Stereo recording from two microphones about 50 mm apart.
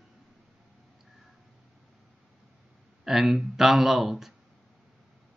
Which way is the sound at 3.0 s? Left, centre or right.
Centre.